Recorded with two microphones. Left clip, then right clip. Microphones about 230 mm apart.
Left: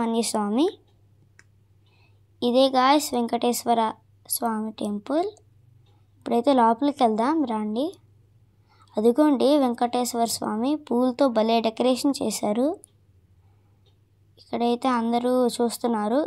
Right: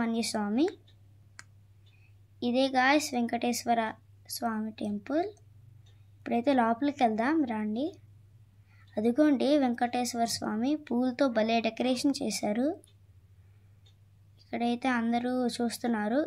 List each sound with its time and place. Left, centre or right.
0.0 s a woman's voice: left
2.4 s a woman's voice: left
14.3 s a woman's voice: left